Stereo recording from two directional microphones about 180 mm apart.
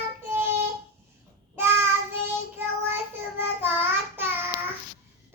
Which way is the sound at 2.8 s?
10° right (ahead or behind).